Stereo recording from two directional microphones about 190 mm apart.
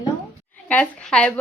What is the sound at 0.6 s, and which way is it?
Speech, 5° left (ahead or behind).